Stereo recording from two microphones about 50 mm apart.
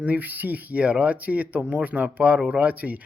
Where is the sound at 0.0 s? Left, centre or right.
Right.